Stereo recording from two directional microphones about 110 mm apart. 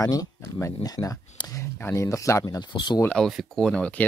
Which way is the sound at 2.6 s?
45° left (ahead or behind).